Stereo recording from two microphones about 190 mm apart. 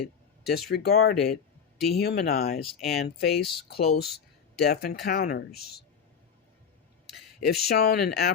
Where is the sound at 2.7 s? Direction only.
Centre (ahead or behind).